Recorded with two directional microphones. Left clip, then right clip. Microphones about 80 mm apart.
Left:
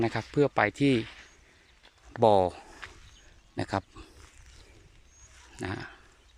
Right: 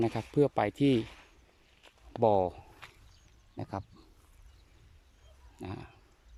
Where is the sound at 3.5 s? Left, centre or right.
Centre.